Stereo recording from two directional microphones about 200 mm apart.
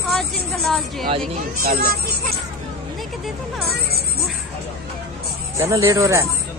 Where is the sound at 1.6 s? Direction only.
50° right (ahead or behind).